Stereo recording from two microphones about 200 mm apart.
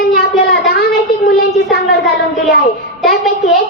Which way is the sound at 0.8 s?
50° left (ahead or behind).